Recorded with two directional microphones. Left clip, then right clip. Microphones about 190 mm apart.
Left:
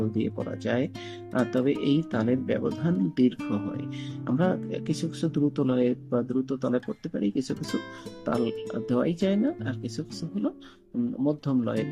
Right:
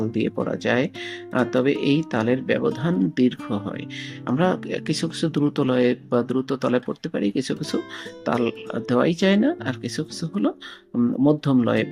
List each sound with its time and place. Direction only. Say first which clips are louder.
0.5 s speech: right 5 dB; 15° right (ahead or behind)